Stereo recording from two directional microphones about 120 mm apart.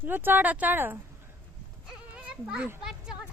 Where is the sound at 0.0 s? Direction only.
15° right (ahead or behind).